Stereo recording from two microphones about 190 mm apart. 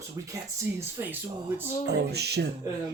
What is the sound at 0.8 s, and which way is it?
Speech, 10° right (ahead or behind).